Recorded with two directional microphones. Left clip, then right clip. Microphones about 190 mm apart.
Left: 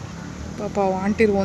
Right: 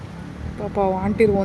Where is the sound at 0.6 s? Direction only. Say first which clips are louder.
Right 1 dB; 5° right (ahead or behind).